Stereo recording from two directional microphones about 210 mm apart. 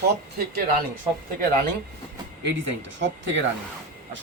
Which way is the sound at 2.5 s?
60° right (ahead or behind).